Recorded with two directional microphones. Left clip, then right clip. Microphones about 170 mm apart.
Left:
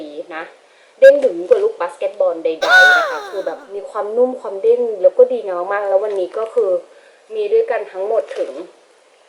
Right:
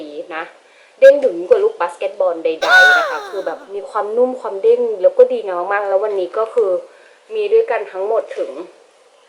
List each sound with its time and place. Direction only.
0.3 s speech: centre (ahead or behind)